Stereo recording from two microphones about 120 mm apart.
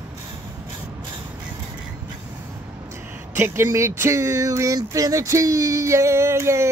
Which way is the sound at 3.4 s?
20° right (ahead or behind).